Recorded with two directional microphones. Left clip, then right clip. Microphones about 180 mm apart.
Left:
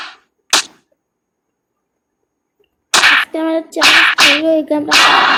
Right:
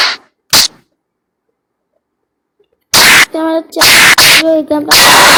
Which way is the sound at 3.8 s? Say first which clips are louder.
Right 4 dB; 55° right (ahead or behind).